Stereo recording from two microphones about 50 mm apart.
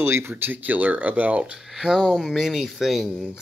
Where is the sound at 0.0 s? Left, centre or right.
Right.